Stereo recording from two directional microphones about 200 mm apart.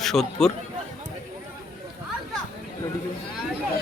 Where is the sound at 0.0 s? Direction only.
Centre (ahead or behind).